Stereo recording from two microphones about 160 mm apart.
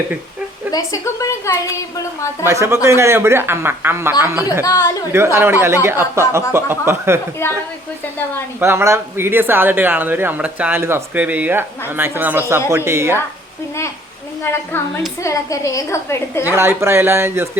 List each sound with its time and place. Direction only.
0.7 s a woman's voice: 20° left (ahead or behind)
2.4 s speech: 15° right (ahead or behind)
4.6 s a woman's voice: 25° left (ahead or behind)
5.1 s speech: 15° right (ahead or behind)
7.4 s a woman's voice: 15° left (ahead or behind)
8.6 s speech: 15° right (ahead or behind)
14.4 s a woman's voice: 15° left (ahead or behind)
16.5 s speech: 15° right (ahead or behind)